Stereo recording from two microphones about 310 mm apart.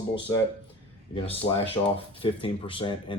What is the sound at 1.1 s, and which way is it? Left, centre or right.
Speech, centre.